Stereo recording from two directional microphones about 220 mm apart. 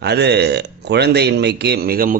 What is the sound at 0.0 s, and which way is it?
Speech, 50° right (ahead or behind).